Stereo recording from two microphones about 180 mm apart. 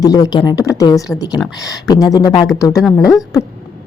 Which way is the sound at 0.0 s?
20° left (ahead or behind).